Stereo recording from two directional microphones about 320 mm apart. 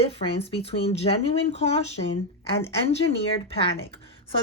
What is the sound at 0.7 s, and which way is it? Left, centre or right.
Speech, centre.